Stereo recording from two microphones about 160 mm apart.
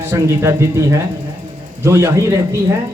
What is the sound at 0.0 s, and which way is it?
A man's voice, 15° right (ahead or behind).